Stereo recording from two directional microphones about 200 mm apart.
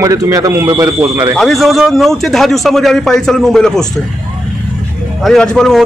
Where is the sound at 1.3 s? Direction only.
Centre (ahead or behind).